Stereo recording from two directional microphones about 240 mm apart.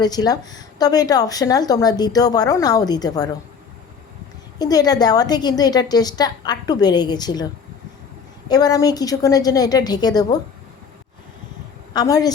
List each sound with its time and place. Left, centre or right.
0.0 s speech: centre
4.5 s speech: centre
11.9 s speech: centre